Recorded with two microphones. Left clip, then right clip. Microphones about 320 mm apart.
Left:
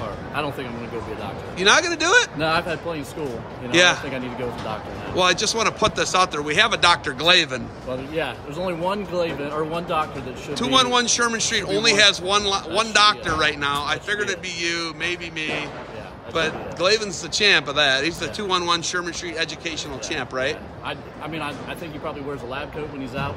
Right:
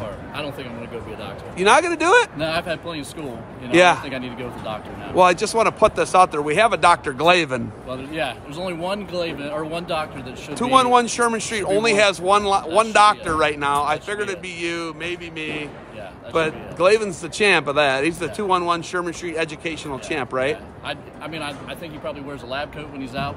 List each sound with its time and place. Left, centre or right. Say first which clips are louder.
1.6 s speech: right 2 dB; centre
2.3 s speech: left 1 dB; centre
3.7 s a man's voice: right 2 dB; centre
5.1 s a man's voice: right 4 dB; centre
8.1 s speech: right 2 dB; centre
10.5 s a man's voice: right 3 dB; centre
16.3 s a man's voice: right 3 dB; centre
22.0 s speech: left 1 dB; centre